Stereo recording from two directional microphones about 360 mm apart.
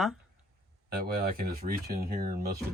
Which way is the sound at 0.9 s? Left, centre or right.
Right.